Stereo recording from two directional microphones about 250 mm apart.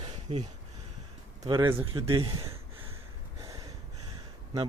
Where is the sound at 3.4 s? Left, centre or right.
Centre.